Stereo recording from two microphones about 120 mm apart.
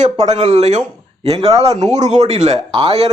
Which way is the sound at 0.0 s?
70° right (ahead or behind).